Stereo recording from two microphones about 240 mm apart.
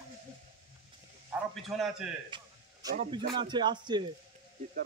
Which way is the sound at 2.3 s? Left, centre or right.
Centre.